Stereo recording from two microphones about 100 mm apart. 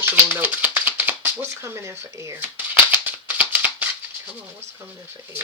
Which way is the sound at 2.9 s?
20° right (ahead or behind).